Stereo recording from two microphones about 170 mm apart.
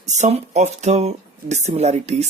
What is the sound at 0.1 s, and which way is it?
Speech, 40° right (ahead or behind).